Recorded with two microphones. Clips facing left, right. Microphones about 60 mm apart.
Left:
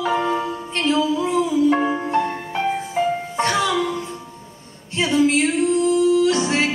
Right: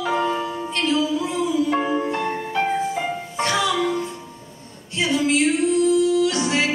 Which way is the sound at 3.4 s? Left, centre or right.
Left.